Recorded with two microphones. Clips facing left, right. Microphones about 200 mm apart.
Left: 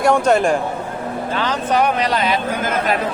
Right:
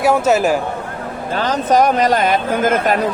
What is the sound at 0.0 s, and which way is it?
Speech, 5° right (ahead or behind).